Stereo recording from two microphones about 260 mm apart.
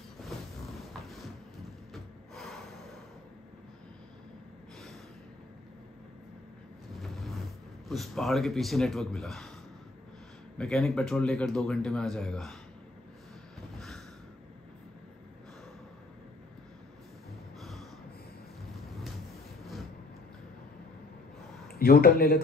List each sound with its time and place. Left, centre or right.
0.2 s a sound: centre
2.0 s snort: centre
6.9 s vehicle: centre
7.9 s speech: centre
10.6 s speech: centre
13.6 s snort: centre
17.6 s snort: centre
21.7 s speech: left